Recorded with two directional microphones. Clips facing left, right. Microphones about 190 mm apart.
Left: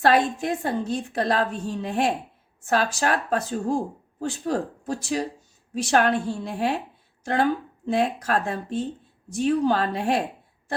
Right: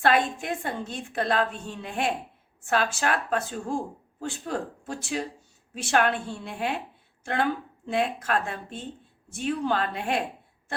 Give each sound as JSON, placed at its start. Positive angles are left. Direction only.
{"t": 0.0, "sound": "a woman's voice", "side_deg": 35}
{"t": 7.9, "sound": "a woman's voice", "side_deg": 35}